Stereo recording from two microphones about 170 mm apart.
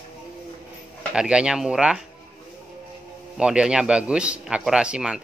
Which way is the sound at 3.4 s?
5° right (ahead or behind).